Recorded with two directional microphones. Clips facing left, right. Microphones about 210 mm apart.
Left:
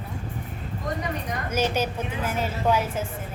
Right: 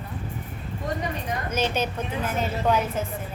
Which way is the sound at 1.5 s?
10° left (ahead or behind).